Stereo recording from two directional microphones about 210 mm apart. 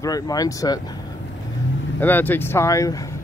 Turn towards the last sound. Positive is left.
turn(degrees=15)  # may be behind; listen again after turning